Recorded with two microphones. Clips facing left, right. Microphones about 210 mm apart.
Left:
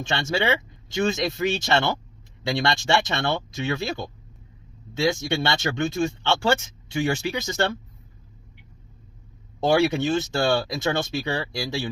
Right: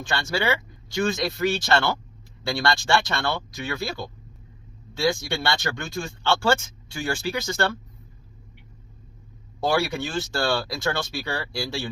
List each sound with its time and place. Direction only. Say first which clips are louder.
0.0 s speech: left 1 dB; 25° left (ahead or behind)
9.6 s speech: left 4 dB; 25° left (ahead or behind)